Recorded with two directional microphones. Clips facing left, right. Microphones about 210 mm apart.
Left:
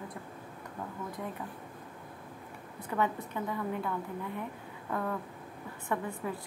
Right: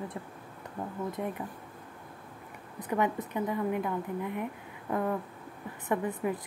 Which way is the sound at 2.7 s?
15° right (ahead or behind).